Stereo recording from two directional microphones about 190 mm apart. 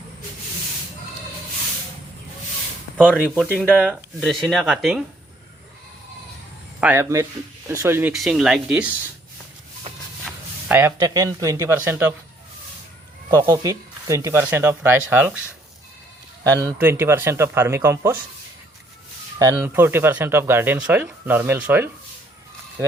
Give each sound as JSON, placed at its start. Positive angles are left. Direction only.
{"t": 3.3, "sound": "speech", "side_deg": 5}
{"t": 6.7, "sound": "speech", "side_deg": -10}
{"t": 8.1, "sound": "speech", "side_deg": 0}
{"t": 10.7, "sound": "speech", "side_deg": -10}
{"t": 13.3, "sound": "speech", "side_deg": -15}
{"t": 16.4, "sound": "speech", "side_deg": -20}
{"t": 19.4, "sound": "speech", "side_deg": -15}